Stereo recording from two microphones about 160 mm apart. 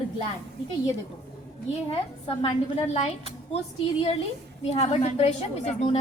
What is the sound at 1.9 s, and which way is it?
A woman's voice, 35° left (ahead or behind).